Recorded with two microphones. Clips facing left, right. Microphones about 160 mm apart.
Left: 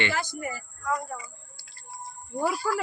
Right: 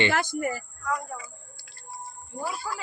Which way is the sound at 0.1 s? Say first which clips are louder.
Right 4 dB; 55° right (ahead or behind).